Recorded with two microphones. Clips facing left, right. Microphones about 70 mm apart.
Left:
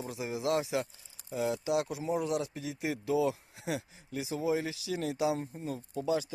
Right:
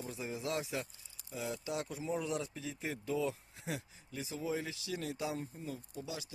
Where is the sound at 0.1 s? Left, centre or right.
Left.